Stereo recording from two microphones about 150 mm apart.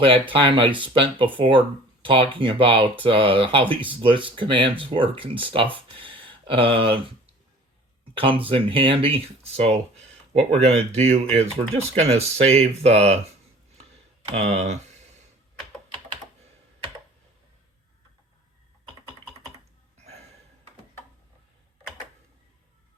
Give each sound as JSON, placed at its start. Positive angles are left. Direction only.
{"t": 0.0, "sound": "speech", "side_deg": -35}
{"t": 8.2, "sound": "speech", "side_deg": -35}
{"t": 14.3, "sound": "speech", "side_deg": -45}
{"t": 20.1, "sound": "a sound", "side_deg": -45}